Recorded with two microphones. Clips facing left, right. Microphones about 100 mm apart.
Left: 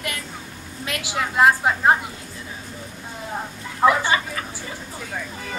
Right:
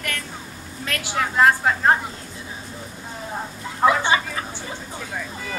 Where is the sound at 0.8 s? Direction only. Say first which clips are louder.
Right 1 dB; 15° left (ahead or behind).